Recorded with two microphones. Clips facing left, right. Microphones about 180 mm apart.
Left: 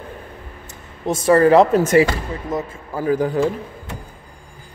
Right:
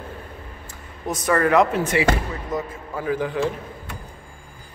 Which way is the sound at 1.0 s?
25° left (ahead or behind).